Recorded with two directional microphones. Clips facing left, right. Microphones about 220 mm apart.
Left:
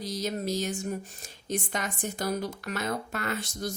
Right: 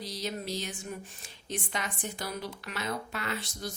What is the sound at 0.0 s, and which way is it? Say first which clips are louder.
Speech: left 5 dB; 45° left (ahead or behind).